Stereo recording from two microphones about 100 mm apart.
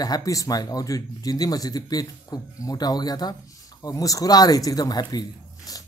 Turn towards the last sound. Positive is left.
turn(degrees=40)  # may be behind; listen again after turning